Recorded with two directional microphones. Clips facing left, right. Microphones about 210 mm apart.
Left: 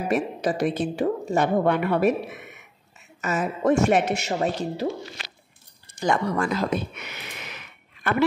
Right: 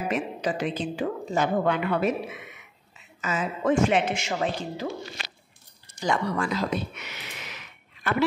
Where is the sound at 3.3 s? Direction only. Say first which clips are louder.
Left 3 dB; 40° left (ahead or behind).